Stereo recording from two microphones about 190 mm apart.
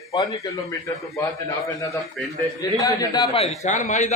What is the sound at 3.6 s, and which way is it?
Speech, 40° left (ahead or behind).